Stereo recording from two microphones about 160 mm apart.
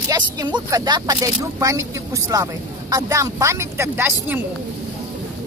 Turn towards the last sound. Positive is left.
turn(degrees=-15)  # may be behind; listen again after turning